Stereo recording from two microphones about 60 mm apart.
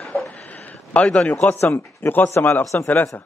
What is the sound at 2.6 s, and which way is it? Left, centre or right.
Speech, left.